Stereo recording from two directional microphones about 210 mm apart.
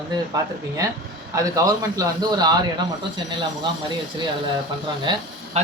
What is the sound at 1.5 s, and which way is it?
Speech, 15° right (ahead or behind).